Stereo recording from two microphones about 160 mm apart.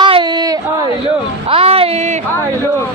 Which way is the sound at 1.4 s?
40° right (ahead or behind).